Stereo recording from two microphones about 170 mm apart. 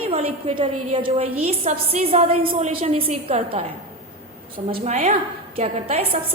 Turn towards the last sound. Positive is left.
turn(degrees=-40)  # may be behind; listen again after turning